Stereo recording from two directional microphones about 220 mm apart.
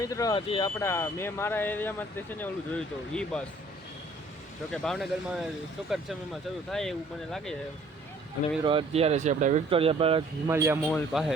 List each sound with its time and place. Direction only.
0.0 s speech: 15° left (ahead or behind)
4.7 s speech: 5° left (ahead or behind)
6.7 s speech: centre (ahead or behind)
8.6 s speech: 25° right (ahead or behind)
10.5 s a man's voice: 10° right (ahead or behind)